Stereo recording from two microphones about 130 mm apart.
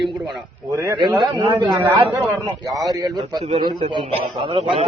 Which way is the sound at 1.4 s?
35° right (ahead or behind).